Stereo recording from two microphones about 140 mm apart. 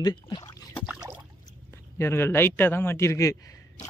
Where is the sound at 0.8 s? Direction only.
5° right (ahead or behind).